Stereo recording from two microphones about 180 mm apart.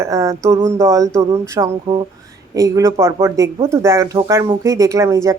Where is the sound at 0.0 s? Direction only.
15° right (ahead or behind).